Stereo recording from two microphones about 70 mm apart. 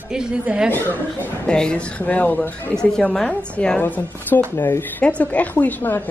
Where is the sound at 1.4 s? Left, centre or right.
Centre.